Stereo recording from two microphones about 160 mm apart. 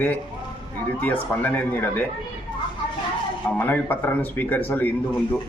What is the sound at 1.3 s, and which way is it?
Speech, 10° left (ahead or behind).